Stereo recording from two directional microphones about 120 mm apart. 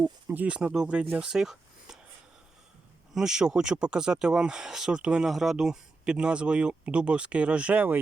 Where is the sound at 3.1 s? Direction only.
5° right (ahead or behind).